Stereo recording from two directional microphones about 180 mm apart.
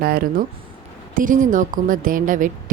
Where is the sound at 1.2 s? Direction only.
45° right (ahead or behind).